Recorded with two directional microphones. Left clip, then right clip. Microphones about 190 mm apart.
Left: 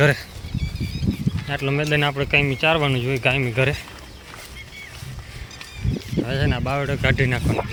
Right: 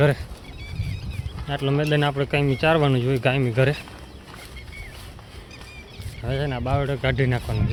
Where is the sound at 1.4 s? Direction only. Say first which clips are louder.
Even; 10° right (ahead or behind).